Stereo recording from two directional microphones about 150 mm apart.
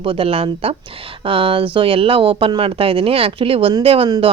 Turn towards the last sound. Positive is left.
turn(degrees=-40)  # may be behind; listen again after turning